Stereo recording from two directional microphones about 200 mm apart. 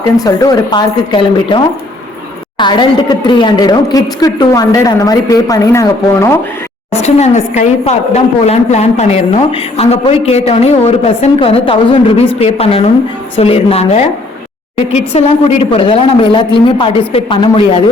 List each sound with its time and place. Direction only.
0.2 s a woman's voice: 20° left (ahead or behind)
6.9 s a woman's voice: 35° left (ahead or behind)